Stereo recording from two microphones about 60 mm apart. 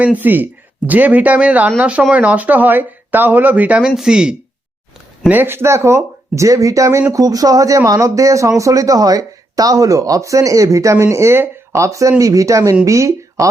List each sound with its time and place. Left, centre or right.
0.0 s speech: right
3.8 s speech: centre
5.3 s speech: right
7.1 s speech: right